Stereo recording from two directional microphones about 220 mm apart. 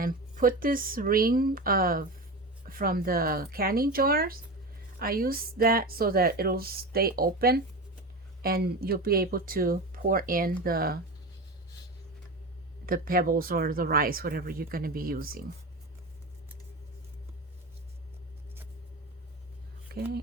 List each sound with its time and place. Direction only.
0.0 s a woman's voice: 40° right (ahead or behind)
12.8 s speech: 40° right (ahead or behind)